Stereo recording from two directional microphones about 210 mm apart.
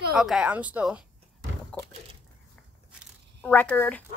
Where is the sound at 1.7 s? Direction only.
5° left (ahead or behind).